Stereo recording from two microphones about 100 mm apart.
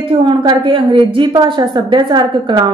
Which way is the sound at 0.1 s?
55° right (ahead or behind).